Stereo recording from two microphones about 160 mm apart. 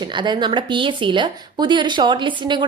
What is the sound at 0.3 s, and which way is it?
Speech, 30° right (ahead or behind).